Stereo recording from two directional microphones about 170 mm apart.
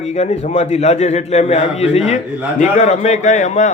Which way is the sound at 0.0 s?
40° left (ahead or behind).